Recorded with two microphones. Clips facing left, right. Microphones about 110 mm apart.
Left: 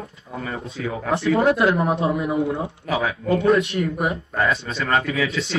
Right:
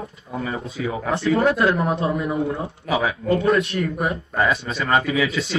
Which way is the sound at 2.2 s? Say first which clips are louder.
Left 1 dB; 25° left (ahead or behind).